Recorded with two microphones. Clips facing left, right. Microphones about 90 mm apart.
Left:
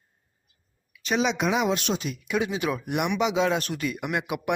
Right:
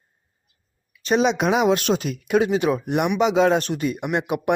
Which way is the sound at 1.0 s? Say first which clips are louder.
Right 5 dB; 45° right (ahead or behind).